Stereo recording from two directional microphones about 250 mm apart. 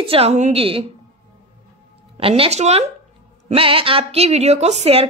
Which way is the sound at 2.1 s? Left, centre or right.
Right.